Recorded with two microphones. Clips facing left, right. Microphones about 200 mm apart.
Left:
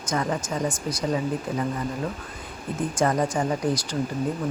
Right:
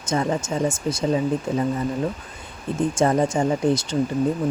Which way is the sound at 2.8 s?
25° right (ahead or behind).